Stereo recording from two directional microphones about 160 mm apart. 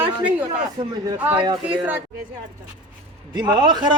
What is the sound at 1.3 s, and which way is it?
Speech, 30° right (ahead or behind).